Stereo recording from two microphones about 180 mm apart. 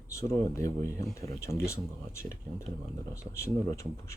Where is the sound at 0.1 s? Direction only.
15° left (ahead or behind).